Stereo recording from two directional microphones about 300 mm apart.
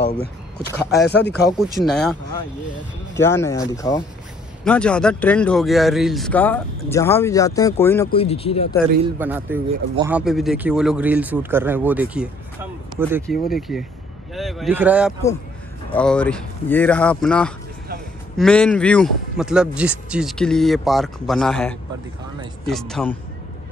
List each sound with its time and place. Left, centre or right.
0.7 s speech: centre
1.0 s speech: left
1.8 s speech: centre
3.2 s speech: centre
8.1 s speech: centre
9.2 s speech: centre